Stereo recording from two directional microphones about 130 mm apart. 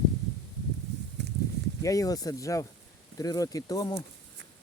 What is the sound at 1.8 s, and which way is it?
Speech, 25° left (ahead or behind).